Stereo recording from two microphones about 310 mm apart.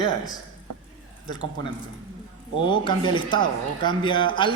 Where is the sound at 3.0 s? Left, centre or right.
Centre.